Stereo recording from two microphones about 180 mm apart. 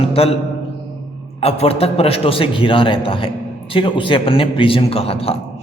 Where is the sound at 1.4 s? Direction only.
35° left (ahead or behind).